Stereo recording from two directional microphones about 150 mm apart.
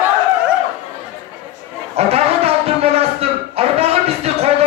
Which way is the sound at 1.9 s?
40° right (ahead or behind).